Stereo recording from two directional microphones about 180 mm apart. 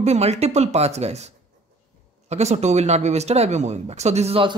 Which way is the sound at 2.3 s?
40° right (ahead or behind).